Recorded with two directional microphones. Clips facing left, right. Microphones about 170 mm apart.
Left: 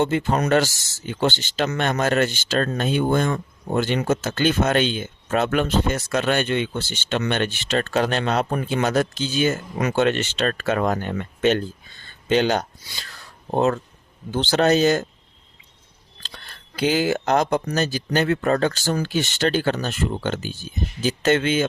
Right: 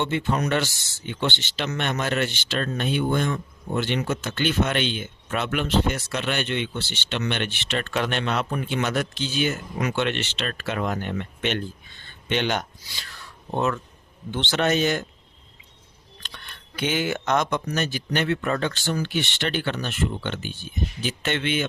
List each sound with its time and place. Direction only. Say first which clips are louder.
0.0 s speech: left 4 dB; 40° left (ahead or behind)
16.2 s speech: left 1 dB; 35° left (ahead or behind)